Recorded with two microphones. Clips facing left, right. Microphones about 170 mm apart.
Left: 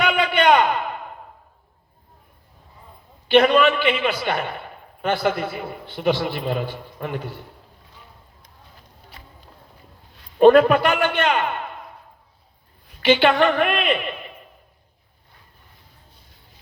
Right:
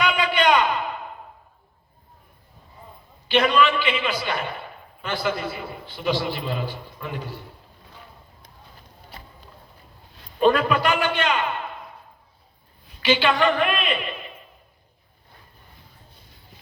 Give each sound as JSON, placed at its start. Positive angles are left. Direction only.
{"t": 0.0, "sound": "a sound", "side_deg": 55}
{"t": 3.2, "sound": "a man's voice", "side_deg": 55}
{"t": 10.4, "sound": "a man's voice", "side_deg": 55}
{"t": 13.0, "sound": "a man's voice", "side_deg": 55}